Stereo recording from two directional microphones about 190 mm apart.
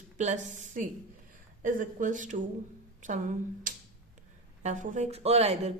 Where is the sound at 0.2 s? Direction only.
40° right (ahead or behind).